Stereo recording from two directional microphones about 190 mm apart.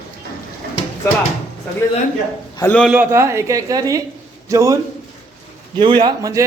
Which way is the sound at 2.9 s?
10° right (ahead or behind).